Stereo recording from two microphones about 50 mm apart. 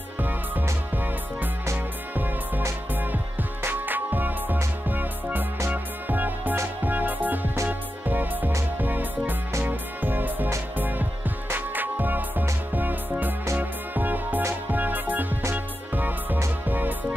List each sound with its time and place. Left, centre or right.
0.2 s music: right
13.6 s music: right